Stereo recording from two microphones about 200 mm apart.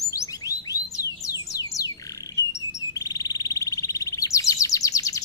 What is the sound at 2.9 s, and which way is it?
Chirp, 15° left (ahead or behind).